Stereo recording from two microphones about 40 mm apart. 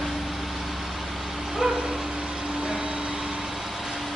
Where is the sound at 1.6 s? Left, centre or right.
Centre.